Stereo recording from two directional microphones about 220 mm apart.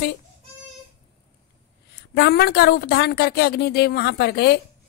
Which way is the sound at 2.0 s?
50° left (ahead or behind).